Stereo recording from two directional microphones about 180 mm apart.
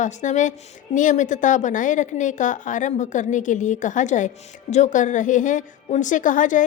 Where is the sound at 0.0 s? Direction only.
40° left (ahead or behind).